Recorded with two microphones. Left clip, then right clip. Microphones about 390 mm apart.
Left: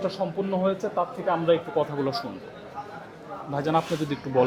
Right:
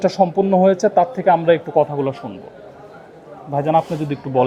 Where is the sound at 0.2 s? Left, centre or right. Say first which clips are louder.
Right 14 dB; right.